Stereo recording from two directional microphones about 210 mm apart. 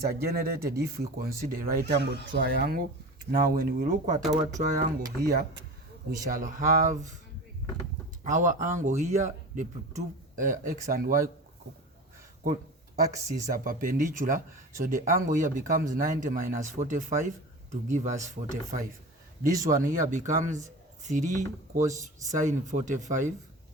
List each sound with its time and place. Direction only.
0.2 s speech: 45° right (ahead or behind)
8.3 s speech: 40° right (ahead or behind)
13.0 s speech: 15° right (ahead or behind)
13.7 s speech: 40° right (ahead or behind)